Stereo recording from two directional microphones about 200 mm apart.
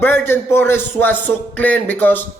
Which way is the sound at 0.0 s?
10° left (ahead or behind).